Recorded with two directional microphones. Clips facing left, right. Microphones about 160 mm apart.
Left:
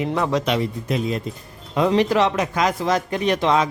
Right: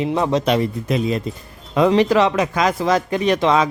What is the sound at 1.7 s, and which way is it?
Speech, 90° right.